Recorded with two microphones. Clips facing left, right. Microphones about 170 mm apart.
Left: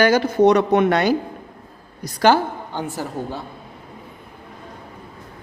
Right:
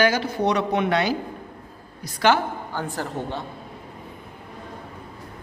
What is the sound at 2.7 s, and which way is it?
Speech, 20° left (ahead or behind).